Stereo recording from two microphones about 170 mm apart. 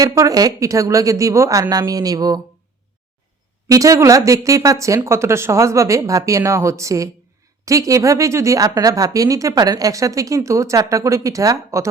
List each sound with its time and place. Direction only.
0.0 s speech: 20° right (ahead or behind)
3.7 s speech: 20° right (ahead or behind)